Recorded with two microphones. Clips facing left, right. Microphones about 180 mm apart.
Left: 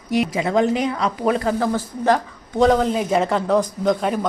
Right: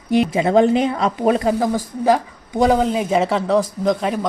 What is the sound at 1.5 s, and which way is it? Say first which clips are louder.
Speech: right 2 dB; 10° right (ahead or behind).